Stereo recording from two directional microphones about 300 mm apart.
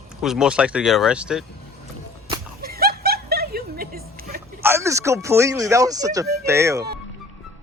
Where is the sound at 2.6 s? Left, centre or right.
Right.